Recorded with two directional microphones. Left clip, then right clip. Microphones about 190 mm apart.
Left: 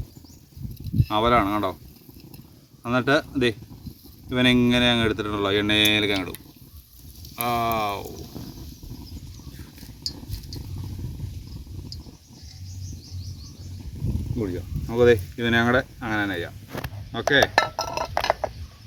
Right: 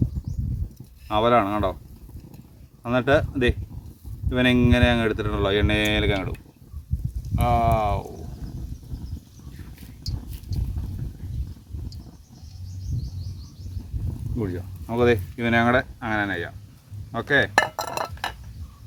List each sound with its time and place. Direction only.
1.0 s speech: centre (ahead or behind)
2.8 s speech: centre (ahead or behind)
14.3 s speech: 25° right (ahead or behind)
17.1 s dishes: 25° right (ahead or behind)